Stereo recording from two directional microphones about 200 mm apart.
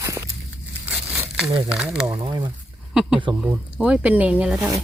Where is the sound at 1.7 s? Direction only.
5° right (ahead or behind).